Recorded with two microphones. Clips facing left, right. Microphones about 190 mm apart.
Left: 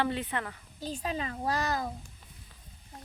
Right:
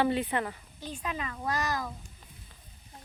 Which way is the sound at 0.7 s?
35° left (ahead or behind).